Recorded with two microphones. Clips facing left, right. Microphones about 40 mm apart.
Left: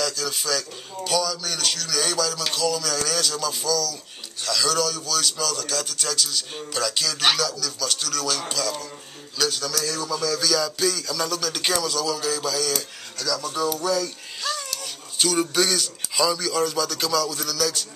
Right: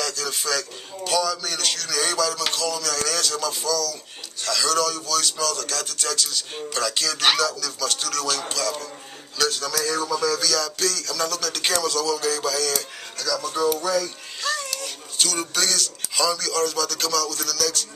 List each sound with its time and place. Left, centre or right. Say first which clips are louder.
0.0 s a man's voice: left 1 dB; centre
9.8 s speech: right 3 dB; right
10.4 s a man's voice: left 1 dB; centre
13.3 s a child's voice: right 2 dB; centre